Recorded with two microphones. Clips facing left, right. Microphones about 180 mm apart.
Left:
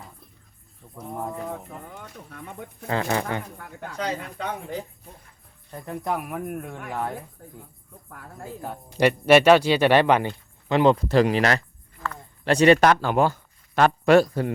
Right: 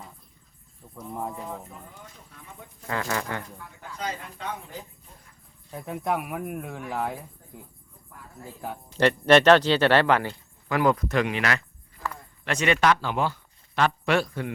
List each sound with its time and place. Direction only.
1.3 s speech: 65° left (ahead or behind)
2.8 s speech: 30° left (ahead or behind)
3.6 s speech: 70° left (ahead or behind)
5.7 s speech: centre (ahead or behind)
8.1 s speech: 70° left (ahead or behind)
9.0 s speech: 10° left (ahead or behind); by 14.5 s 40° left (ahead or behind)